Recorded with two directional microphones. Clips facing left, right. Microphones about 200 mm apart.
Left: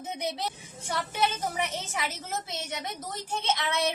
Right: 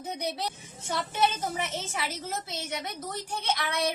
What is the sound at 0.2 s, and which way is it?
A woman's voice, 20° left (ahead or behind).